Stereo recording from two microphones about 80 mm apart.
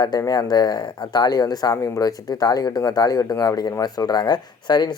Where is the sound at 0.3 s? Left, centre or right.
Left.